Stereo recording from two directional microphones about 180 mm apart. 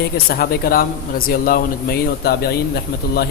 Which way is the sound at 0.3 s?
55° left (ahead or behind).